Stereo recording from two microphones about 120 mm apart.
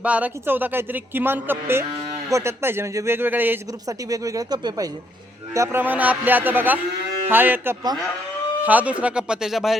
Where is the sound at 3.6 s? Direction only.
30° right (ahead or behind).